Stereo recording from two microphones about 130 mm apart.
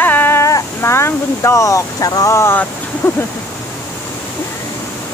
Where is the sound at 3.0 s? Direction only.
15° left (ahead or behind).